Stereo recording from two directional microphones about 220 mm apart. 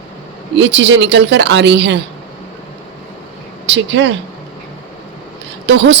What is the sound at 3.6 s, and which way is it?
Speech, 55° right (ahead or behind).